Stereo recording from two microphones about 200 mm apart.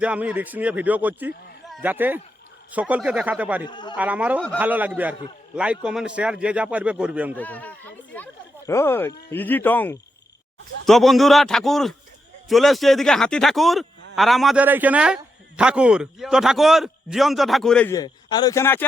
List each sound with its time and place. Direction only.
0.0 s speech: 5° right (ahead or behind)
3.7 s a man's voice: 20° left (ahead or behind)
3.9 s a man's voice: 5° right (ahead or behind)
7.3 s a man's voice: 10° left (ahead or behind)
17.9 s a man's voice: 20° left (ahead or behind)